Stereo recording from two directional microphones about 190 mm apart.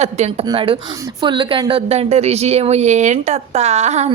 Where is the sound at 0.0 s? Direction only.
35° right (ahead or behind).